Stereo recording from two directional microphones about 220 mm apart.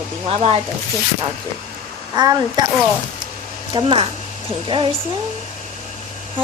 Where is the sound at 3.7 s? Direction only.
25° right (ahead or behind).